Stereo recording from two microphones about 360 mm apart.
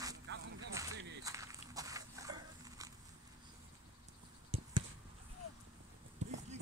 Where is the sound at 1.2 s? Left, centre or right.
Centre.